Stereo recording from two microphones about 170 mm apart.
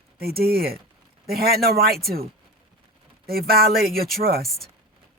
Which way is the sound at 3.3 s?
65° right (ahead or behind).